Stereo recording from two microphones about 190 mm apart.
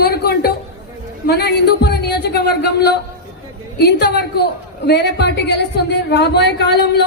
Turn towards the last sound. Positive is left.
turn(degrees=60)  # may be behind; listen again after turning